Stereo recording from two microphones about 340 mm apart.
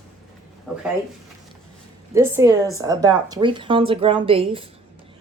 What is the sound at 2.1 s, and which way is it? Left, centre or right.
Speech, centre.